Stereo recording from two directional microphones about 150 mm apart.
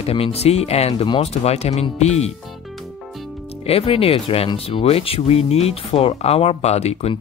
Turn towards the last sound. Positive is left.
turn(degrees=45)  # may be behind; listen again after turning